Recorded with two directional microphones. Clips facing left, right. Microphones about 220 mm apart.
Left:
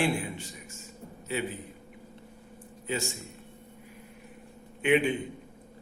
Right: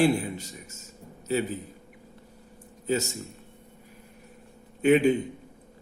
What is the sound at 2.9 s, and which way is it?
Speech, 40° right (ahead or behind).